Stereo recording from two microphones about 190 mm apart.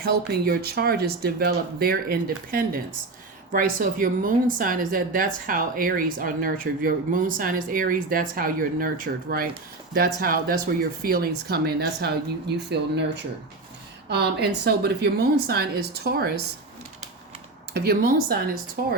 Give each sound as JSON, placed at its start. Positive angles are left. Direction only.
{"t": 0.0, "sound": "speech", "side_deg": -55}
{"t": 9.9, "sound": "a woman's voice", "side_deg": -50}
{"t": 17.7, "sound": "a woman's voice", "side_deg": -55}